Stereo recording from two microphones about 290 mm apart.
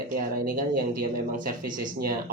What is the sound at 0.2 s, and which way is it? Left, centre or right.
Speech, right.